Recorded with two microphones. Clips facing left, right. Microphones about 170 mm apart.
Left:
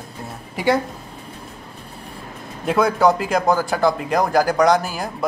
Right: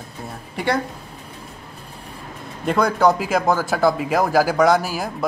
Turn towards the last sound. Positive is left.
turn(degrees=-5)  # may be behind; listen again after turning